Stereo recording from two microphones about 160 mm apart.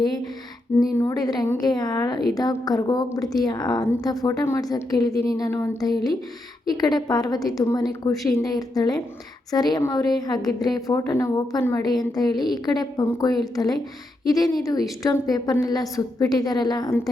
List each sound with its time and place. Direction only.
0.9 s a woman's voice: 20° left (ahead or behind)